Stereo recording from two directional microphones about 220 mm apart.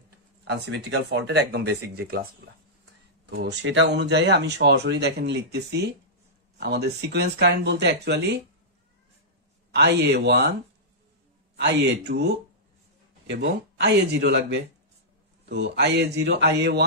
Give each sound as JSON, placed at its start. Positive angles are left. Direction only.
{"t": 0.5, "sound": "speech", "side_deg": -50}
{"t": 3.3, "sound": "speech", "side_deg": -50}
{"t": 9.8, "sound": "speech", "side_deg": -50}
{"t": 11.5, "sound": "speech", "side_deg": -50}
{"t": 13.3, "sound": "speech", "side_deg": -50}